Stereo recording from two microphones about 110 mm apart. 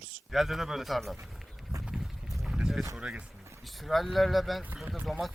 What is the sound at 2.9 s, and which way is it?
Speech, 5° right (ahead or behind).